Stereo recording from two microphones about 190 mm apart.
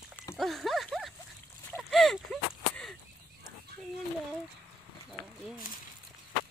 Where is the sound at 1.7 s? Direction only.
Centre (ahead or behind).